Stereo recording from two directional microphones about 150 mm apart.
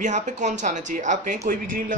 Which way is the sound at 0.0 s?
55° right (ahead or behind).